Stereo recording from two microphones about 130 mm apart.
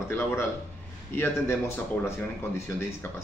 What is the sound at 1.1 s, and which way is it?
Speech, 15° left (ahead or behind).